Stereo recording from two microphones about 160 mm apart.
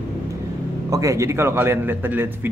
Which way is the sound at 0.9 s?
20° right (ahead or behind).